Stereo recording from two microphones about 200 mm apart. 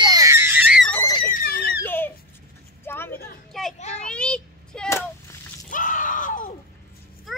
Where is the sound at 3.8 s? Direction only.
35° left (ahead or behind).